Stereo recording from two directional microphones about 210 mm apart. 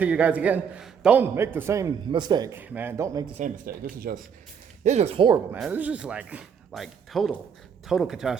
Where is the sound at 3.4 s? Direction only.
45° right (ahead or behind).